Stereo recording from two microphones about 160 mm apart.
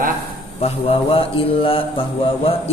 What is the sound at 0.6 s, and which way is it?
Mantra, 35° left (ahead or behind).